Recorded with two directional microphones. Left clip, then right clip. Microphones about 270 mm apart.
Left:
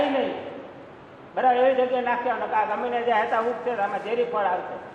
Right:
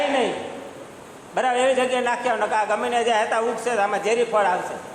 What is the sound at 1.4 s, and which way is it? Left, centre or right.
A man's voice, right.